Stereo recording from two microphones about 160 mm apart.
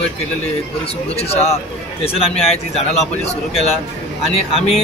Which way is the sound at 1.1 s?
40° left (ahead or behind).